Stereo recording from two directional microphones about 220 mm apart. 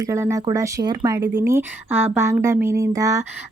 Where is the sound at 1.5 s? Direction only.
10° right (ahead or behind).